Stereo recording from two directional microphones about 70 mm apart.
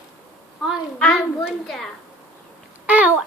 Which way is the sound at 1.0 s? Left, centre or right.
Centre.